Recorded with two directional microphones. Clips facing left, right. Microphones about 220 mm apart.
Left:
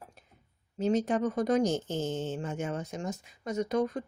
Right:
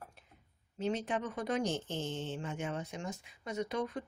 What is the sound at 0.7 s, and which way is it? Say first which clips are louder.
Speech: left 7 dB; 40° left (ahead or behind).